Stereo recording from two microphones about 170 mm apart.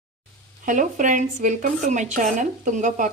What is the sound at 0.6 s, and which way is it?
Speech, 50° right (ahead or behind).